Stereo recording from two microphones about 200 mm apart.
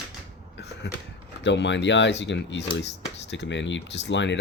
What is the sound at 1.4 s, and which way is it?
Speech, 65° left (ahead or behind).